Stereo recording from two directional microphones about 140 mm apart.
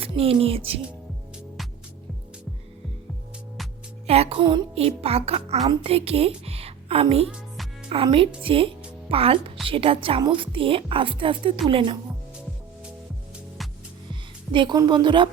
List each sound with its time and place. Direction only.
0.0 s music: 45° right (ahead or behind)
4.0 s a woman's voice: 50° right (ahead or behind)
7.3 s music: centre (ahead or behind)
8.0 s a woman's voice: 40° right (ahead or behind)
14.1 s a woman's voice: 35° right (ahead or behind)